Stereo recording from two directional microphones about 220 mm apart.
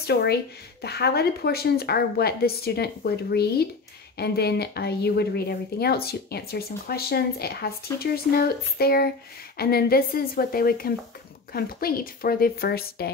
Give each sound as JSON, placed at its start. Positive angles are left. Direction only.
{"t": 0.0, "sound": "speech", "side_deg": 50}